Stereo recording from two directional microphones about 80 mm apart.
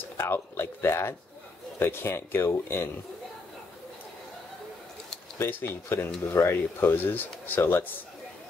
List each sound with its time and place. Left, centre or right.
0.2 s speech: left
5.4 s speech: left